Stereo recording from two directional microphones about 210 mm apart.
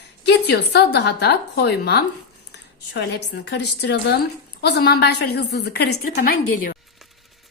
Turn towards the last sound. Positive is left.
turn(degrees=40)  # may be behind; listen again after turning